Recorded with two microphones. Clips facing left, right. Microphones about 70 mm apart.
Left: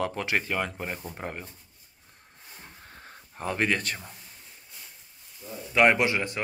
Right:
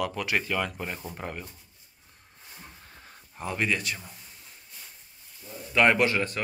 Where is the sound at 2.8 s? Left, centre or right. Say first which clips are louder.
Left 3 dB; left.